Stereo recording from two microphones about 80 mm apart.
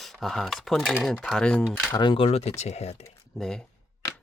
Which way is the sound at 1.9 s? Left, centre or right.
Left.